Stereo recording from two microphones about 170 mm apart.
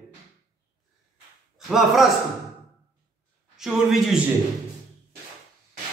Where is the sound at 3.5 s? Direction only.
Centre (ahead or behind).